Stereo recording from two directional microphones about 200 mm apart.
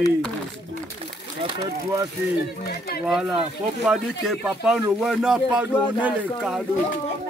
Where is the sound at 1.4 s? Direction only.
25° right (ahead or behind).